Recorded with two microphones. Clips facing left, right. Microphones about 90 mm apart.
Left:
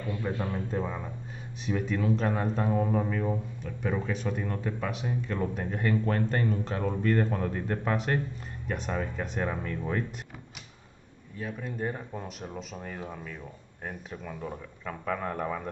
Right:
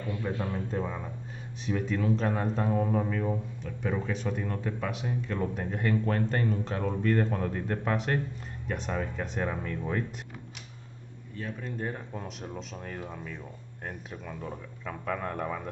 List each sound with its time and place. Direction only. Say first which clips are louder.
0.1 s speech: left 1 dB; 5° left (ahead or behind)